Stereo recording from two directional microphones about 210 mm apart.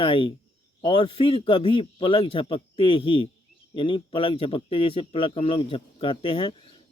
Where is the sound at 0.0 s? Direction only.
25° left (ahead or behind).